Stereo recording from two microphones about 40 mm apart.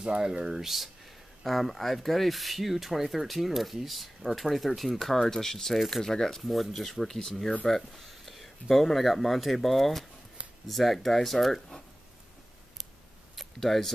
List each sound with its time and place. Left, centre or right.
0.0 s speech: centre
0.5 s speech: centre
1.4 s speech: centre
6.4 s speech: centre
7.9 s speech: centre
13.4 s speech: centre